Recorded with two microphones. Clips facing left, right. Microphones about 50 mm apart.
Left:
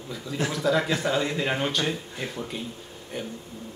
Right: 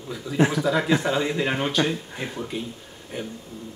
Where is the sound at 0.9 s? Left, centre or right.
Centre.